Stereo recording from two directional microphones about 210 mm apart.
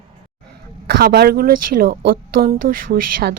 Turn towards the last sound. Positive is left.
turn(degrees=-45)  # may be behind; listen again after turning